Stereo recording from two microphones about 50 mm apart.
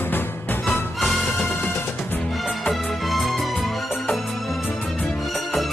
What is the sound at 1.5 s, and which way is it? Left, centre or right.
Music, left.